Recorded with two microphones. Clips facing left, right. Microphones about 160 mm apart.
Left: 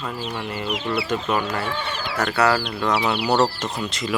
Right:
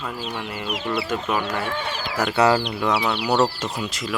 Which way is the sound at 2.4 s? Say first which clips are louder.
Right 2 dB; 20° right (ahead or behind).